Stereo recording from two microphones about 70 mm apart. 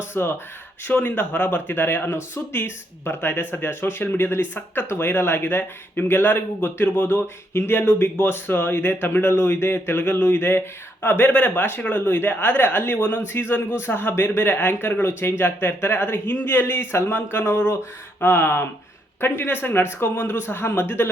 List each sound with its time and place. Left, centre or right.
0.1 s speech: left